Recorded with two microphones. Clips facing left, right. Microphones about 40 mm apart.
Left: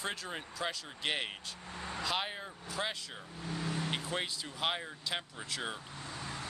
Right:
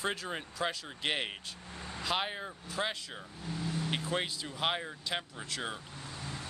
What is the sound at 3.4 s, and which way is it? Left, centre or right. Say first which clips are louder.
Vehicle: even; left.